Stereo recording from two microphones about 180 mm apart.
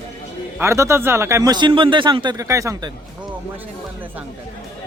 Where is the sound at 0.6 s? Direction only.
15° right (ahead or behind).